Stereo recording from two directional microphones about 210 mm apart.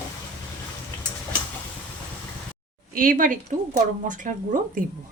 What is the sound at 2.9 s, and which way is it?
A woman's voice, 40° right (ahead or behind).